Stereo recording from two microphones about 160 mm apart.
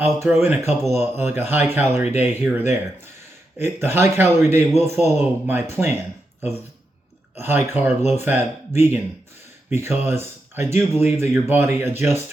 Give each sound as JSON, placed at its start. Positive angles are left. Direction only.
{"t": 0.0, "sound": "speech", "side_deg": -15}
{"t": 7.3, "sound": "speech", "side_deg": -15}